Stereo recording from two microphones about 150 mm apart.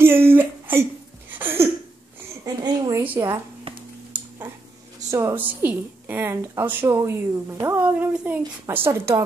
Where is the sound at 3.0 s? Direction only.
15° right (ahead or behind).